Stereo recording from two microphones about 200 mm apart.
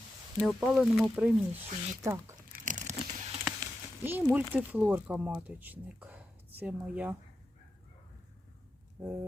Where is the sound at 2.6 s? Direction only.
40° right (ahead or behind).